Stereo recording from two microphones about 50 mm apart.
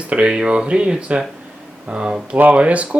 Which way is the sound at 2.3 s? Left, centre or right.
Right.